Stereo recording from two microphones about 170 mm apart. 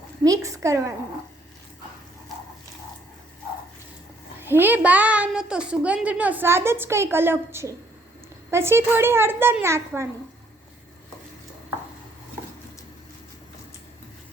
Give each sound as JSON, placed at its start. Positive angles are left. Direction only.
{"t": 0.3, "sound": "a woman's voice", "side_deg": -20}
{"t": 4.4, "sound": "a child's voice", "side_deg": -10}